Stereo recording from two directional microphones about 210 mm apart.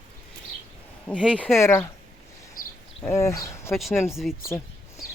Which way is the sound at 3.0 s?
15° left (ahead or behind).